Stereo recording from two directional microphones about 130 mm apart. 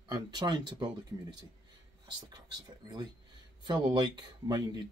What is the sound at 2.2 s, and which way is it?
Speech, 30° right (ahead or behind).